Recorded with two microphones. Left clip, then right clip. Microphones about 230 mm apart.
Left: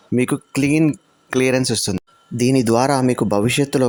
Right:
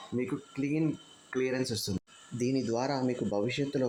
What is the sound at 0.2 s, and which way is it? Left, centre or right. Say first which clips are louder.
Speech: left 15 dB; left.